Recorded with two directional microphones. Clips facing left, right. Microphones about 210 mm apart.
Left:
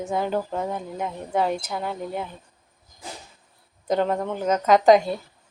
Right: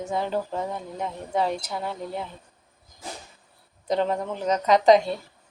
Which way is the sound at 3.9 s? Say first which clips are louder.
Left 2 dB; 45° left (ahead or behind).